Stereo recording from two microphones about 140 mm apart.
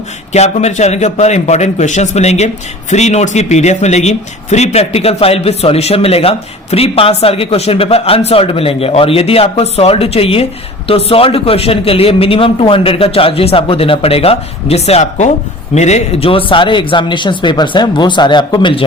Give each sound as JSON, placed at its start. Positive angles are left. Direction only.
{"t": 0.3, "sound": "speech", "side_deg": 50}